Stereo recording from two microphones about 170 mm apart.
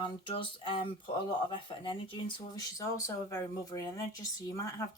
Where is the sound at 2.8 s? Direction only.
20° left (ahead or behind).